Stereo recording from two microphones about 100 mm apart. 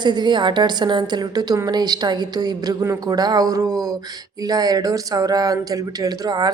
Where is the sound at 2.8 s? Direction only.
30° right (ahead or behind).